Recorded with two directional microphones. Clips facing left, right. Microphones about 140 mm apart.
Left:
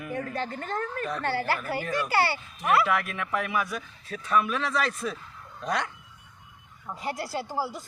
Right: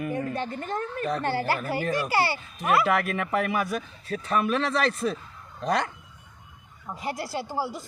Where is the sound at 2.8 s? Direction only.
50° right (ahead or behind); by 5.9 s 35° right (ahead or behind).